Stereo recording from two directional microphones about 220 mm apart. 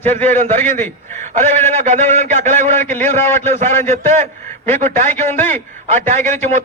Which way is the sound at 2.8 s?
10° left (ahead or behind).